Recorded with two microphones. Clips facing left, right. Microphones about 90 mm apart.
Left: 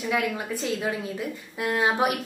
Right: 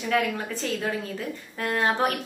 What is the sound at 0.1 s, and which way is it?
A woman's voice, 10° left (ahead or behind).